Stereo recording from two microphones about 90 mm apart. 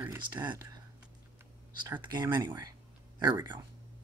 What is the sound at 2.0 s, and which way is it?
Speech, 55° right (ahead or behind).